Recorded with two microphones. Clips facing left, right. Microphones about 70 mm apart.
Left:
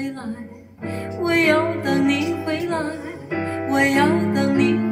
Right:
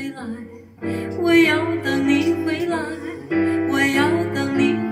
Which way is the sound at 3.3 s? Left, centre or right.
Right.